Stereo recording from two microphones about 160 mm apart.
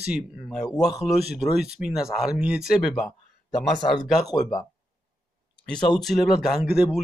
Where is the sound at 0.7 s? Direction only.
25° left (ahead or behind).